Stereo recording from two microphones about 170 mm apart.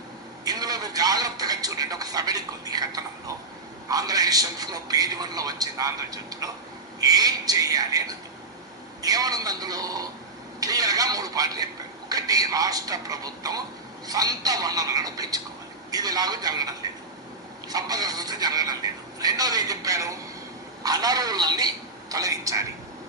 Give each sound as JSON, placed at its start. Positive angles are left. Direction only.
{"t": 0.4, "sound": "speech", "side_deg": -25}